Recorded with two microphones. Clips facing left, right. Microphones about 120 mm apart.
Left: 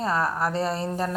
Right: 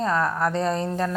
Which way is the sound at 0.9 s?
15° left (ahead or behind).